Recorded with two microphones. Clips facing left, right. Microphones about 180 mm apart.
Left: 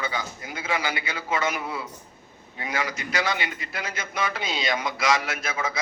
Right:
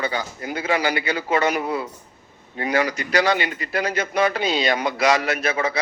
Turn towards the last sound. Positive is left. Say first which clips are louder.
# right 7 dB
turn(degrees=-65)  # may be behind; listen again after turning